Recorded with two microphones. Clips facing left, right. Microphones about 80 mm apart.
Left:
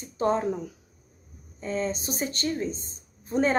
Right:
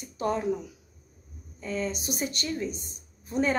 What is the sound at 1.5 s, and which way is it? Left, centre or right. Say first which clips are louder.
A woman's voice: left 2 dB; left.